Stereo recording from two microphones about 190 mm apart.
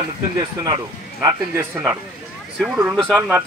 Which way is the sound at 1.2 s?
15° right (ahead or behind).